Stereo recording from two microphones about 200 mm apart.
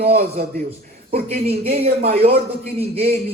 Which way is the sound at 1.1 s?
30° right (ahead or behind).